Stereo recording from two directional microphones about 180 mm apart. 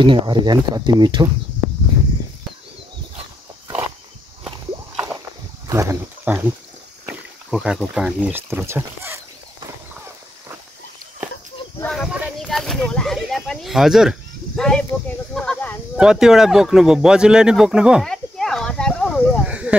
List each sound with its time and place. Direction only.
0.0 s speech: 25° right (ahead or behind)
4.9 s rowboat: 10° right (ahead or behind)
5.7 s speech: 15° right (ahead or behind)
11.8 s a sound: centre (ahead or behind)
16.0 s speech: 5° right (ahead or behind)
19.4 s a sound: 5° right (ahead or behind)